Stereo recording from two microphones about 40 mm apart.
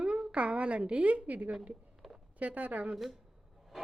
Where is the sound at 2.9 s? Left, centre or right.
Centre.